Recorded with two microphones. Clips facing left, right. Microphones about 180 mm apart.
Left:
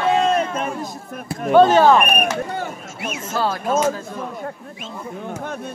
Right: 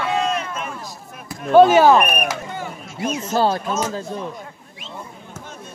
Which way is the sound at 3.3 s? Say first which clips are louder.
Right 3 dB; 30° right (ahead or behind).